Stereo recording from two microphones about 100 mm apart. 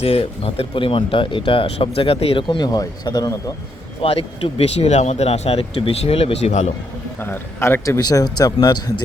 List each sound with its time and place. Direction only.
0.0 s speech: 85° left
2.6 s a man's voice: 40° left (ahead or behind)
4.0 s speech: 70° left (ahead or behind); by 6.7 s 85° left
7.2 s a man's voice: 20° left (ahead or behind)
7.9 s a man's voice: 40° left (ahead or behind)